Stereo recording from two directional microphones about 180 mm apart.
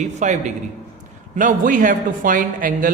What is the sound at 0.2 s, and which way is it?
A man's voice, 40° right (ahead or behind).